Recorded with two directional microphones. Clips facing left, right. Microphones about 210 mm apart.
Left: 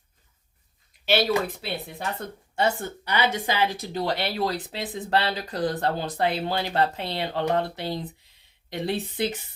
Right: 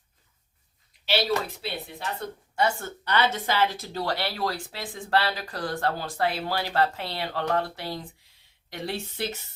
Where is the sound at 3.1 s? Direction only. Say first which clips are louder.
Even; 10° left (ahead or behind).